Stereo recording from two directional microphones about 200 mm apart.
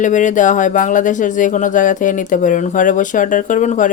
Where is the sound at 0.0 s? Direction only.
40° left (ahead or behind).